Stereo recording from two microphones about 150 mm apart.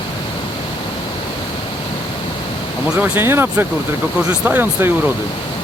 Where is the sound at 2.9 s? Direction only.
10° right (ahead or behind).